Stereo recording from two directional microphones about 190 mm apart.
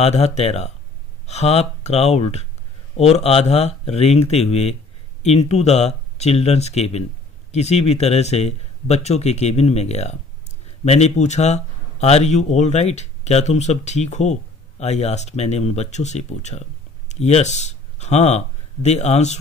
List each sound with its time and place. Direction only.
0.0 s speech: 35° left (ahead or behind)